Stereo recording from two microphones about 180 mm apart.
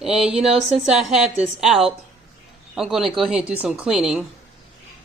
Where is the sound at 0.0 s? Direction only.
5° right (ahead or behind).